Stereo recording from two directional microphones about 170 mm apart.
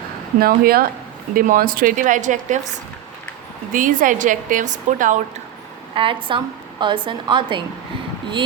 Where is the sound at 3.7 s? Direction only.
50° right (ahead or behind).